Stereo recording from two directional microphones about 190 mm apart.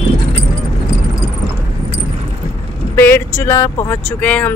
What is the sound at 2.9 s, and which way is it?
Speech, 10° left (ahead or behind).